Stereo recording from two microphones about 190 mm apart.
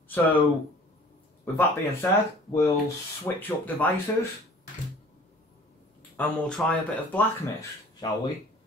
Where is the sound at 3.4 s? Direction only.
10° left (ahead or behind).